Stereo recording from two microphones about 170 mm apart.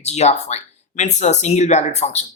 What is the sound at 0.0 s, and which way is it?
Speech, 40° left (ahead or behind).